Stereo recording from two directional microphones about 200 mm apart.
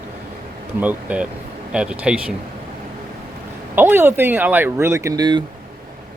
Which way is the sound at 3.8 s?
10° right (ahead or behind).